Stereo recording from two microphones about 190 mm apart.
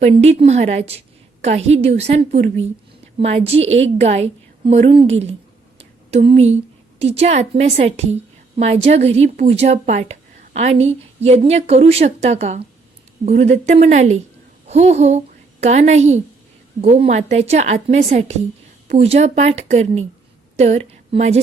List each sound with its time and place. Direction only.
0.0 s a woman's voice: 35° right (ahead or behind)
3.7 s a woman's voice: 85° right
4.0 s a woman's voice: 35° right (ahead or behind)
5.8 s a sound: 30° right (ahead or behind)
7.0 s a woman's voice: 35° right (ahead or behind)